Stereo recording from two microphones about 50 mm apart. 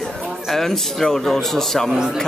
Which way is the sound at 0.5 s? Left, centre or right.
Centre.